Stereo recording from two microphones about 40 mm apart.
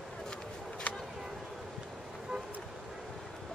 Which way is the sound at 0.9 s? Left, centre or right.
Left.